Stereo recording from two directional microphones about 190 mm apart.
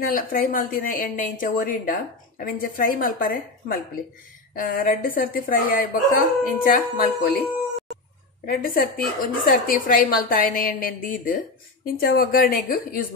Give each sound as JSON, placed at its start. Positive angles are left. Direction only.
{"t": 0.1, "sound": "speech", "side_deg": 45}
{"t": 8.5, "sound": "speech", "side_deg": 50}